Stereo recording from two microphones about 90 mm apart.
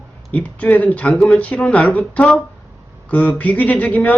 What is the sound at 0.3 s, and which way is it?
Speech, 15° left (ahead or behind).